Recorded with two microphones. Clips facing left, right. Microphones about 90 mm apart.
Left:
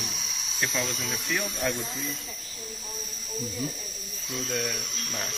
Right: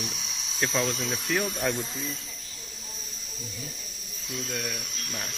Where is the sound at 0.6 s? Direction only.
35° right (ahead or behind).